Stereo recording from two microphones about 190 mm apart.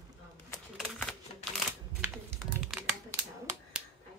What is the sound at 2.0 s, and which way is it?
Typing, 10° right (ahead or behind).